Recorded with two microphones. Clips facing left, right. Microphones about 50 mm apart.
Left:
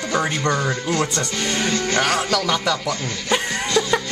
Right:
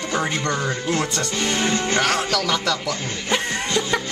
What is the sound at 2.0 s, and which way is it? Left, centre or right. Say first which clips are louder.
Speech: left 3 dB; centre.